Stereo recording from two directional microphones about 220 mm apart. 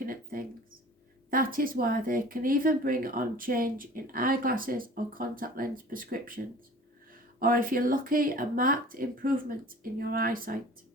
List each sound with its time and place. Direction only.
0.0 s mouse: 40° right (ahead or behind)
1.3 s speech: 40° right (ahead or behind)